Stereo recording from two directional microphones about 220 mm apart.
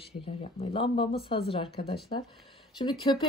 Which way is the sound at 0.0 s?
25° left (ahead or behind).